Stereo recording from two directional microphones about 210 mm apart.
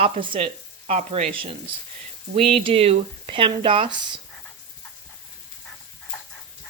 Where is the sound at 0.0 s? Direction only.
25° right (ahead or behind).